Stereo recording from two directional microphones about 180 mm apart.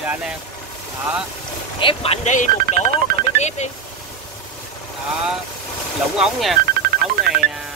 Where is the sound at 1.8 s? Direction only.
30° left (ahead or behind).